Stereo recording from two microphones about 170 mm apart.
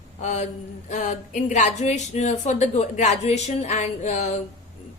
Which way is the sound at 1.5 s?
45° left (ahead or behind).